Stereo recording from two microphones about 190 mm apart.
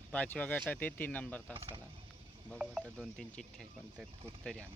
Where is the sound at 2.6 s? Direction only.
10° right (ahead or behind).